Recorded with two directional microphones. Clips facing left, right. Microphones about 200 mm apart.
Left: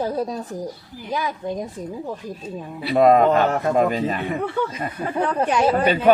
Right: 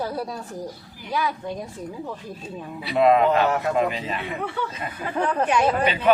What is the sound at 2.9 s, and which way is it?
Speech, 45° left (ahead or behind).